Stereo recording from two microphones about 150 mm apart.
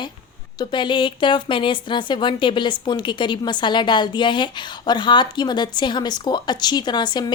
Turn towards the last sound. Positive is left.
turn(degrees=30)  # may be behind; listen again after turning